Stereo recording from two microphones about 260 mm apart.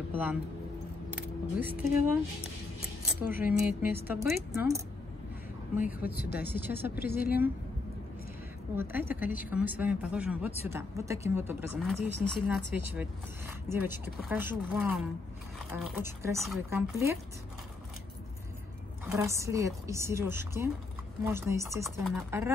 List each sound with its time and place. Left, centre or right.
0.1 s speech: centre
1.8 s speech: centre
3.2 s a woman's voice: centre
6.1 s a woman's voice: left
6.5 s speech: centre
7.1 s a woman's voice: left
8.7 s speech: centre
13.7 s speech: centre
19.0 s speech: centre